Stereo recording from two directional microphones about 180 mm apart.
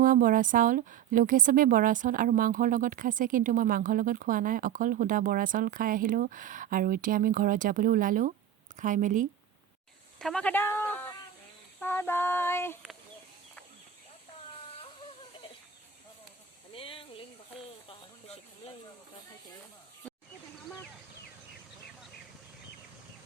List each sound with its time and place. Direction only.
0.0 s a woman's voice: 50° right (ahead or behind)
10.2 s child singing: 5° left (ahead or behind)
16.7 s a sound: 30° left (ahead or behind)